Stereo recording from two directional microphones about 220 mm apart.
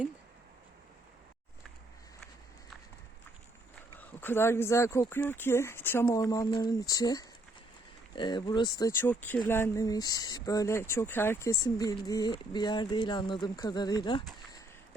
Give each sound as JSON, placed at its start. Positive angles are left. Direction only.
{"t": 3.9, "sound": "speech", "side_deg": 10}